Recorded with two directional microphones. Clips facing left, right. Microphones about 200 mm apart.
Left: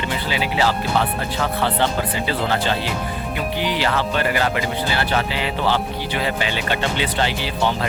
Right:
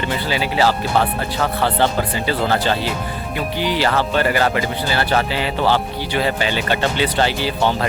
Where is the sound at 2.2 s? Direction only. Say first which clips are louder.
Right 4 dB; 40° right (ahead or behind).